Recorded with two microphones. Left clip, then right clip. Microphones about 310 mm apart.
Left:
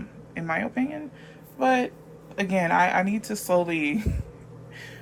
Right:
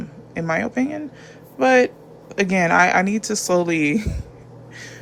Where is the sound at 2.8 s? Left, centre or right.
Right.